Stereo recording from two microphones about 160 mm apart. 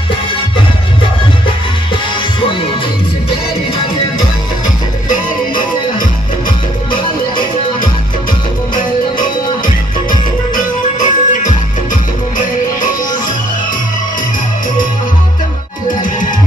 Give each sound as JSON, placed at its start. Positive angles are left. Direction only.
{"t": 10.5, "sound": "music", "side_deg": 50}